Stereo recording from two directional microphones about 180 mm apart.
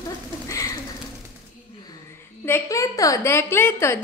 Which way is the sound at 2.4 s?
15° left (ahead or behind).